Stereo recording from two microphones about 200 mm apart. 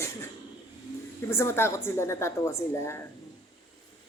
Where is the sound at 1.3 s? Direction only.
10° left (ahead or behind).